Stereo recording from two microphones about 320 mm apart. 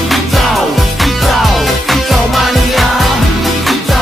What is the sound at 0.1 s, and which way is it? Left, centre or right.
Music, centre.